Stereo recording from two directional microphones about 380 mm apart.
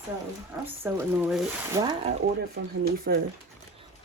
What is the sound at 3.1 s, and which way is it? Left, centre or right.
Speech, right.